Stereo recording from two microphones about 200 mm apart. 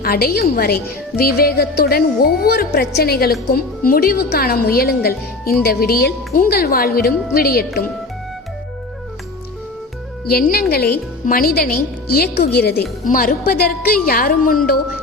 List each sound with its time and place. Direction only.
0.0 s speech: 50° left (ahead or behind)
10.3 s speech: 50° left (ahead or behind)